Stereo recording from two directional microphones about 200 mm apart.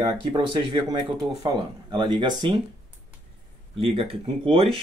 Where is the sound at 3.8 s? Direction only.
30° right (ahead or behind).